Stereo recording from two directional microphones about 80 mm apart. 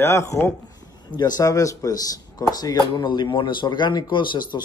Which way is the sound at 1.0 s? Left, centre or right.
Left.